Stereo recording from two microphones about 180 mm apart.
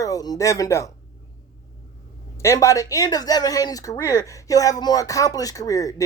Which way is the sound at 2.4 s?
15° left (ahead or behind).